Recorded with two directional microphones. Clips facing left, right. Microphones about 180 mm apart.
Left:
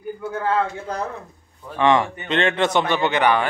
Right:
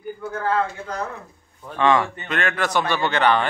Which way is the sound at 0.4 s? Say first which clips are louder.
Left 1 dB; 20° left (ahead or behind).